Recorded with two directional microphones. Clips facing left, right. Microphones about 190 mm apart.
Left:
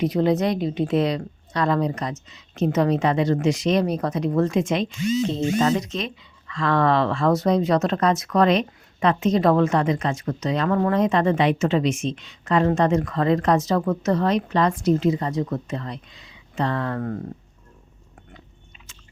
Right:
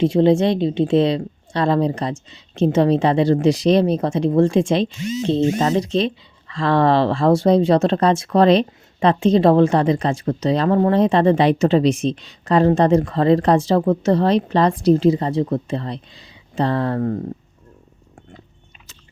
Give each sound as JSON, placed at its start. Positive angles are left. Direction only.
{"t": 0.0, "sound": "a woman's voice", "side_deg": -25}